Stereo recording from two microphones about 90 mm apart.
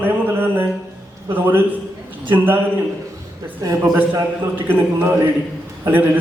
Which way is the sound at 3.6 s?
40° right (ahead or behind).